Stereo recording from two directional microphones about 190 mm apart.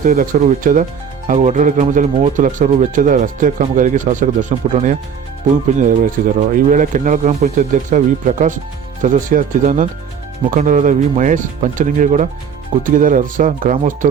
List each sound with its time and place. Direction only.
0.0 s speech: 45° right (ahead or behind)